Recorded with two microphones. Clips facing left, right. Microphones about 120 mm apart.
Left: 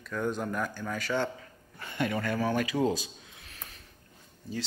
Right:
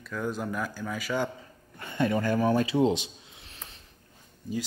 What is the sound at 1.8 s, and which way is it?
A man's voice, 25° right (ahead or behind).